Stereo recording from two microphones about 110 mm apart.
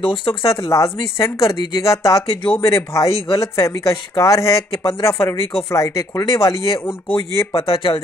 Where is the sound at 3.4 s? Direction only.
30° left (ahead or behind).